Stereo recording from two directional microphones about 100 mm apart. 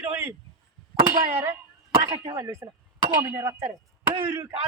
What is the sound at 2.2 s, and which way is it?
Speech, 40° right (ahead or behind).